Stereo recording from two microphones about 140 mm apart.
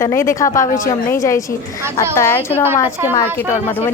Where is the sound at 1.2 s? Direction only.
20° left (ahead or behind).